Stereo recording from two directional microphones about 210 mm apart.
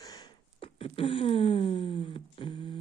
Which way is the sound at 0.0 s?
20° left (ahead or behind).